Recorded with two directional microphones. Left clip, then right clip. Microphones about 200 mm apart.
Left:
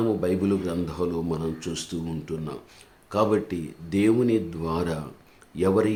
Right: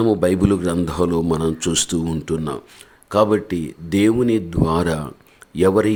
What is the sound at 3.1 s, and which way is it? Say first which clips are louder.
Speech: right 7 dB; 30° right (ahead or behind).